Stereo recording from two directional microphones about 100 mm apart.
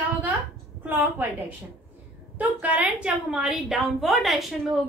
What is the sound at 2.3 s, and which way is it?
A woman's voice, 15° right (ahead or behind).